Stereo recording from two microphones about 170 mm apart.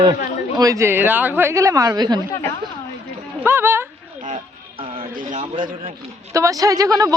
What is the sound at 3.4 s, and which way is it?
Speech, 15° right (ahead or behind).